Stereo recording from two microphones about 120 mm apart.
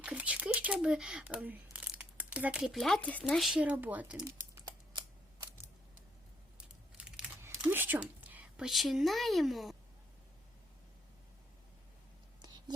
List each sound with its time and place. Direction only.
0.0 s speech: 10° right (ahead or behind); by 3.2 s 10° left (ahead or behind)
3.2 s speech: centre (ahead or behind)
3.6 s speech: 15° right (ahead or behind)
4.2 s crumpling: 25° right (ahead or behind)
4.6 s camera: 35° right (ahead or behind)
6.6 s a sound: 5° right (ahead or behind)
7.6 s a woman's voice: 15° right (ahead or behind)